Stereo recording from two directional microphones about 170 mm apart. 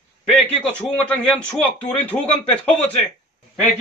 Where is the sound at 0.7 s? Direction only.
5° left (ahead or behind).